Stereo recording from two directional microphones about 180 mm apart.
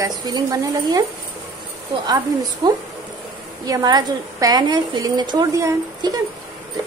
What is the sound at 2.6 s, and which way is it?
A woman's voice, 25° right (ahead or behind).